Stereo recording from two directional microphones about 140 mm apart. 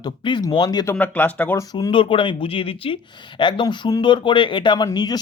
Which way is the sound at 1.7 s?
35° left (ahead or behind).